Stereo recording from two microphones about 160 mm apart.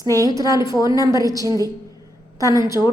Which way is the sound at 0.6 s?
25° left (ahead or behind).